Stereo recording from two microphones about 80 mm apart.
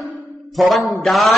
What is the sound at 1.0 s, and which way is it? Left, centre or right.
Speech, centre.